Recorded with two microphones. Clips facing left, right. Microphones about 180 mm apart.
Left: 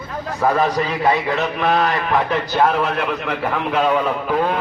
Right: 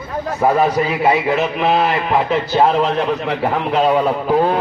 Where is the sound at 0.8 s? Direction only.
15° right (ahead or behind).